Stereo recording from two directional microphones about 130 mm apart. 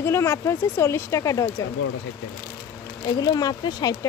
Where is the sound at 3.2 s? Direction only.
30° left (ahead or behind).